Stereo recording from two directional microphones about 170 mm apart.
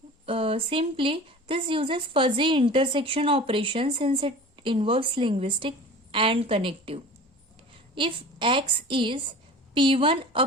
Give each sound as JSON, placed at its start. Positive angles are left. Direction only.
{"t": 0.3, "sound": "a woman's voice", "side_deg": -35}